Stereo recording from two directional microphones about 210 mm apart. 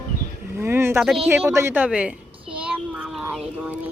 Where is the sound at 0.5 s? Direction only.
10° right (ahead or behind).